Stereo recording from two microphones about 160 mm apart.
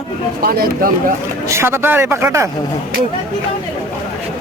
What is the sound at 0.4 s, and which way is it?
Speech, 70° right (ahead or behind).